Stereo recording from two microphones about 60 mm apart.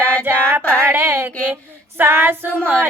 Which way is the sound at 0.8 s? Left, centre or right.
Right.